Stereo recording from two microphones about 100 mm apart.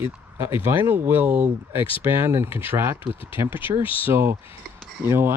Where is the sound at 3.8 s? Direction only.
65° left (ahead or behind).